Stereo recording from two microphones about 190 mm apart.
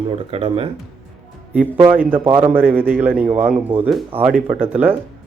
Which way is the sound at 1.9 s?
10° right (ahead or behind).